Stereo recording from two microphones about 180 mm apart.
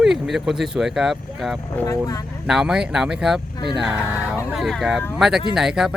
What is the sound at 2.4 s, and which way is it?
Speech, 5° right (ahead or behind).